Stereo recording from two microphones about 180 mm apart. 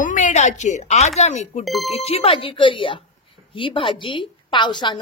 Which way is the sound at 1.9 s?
35° left (ahead or behind).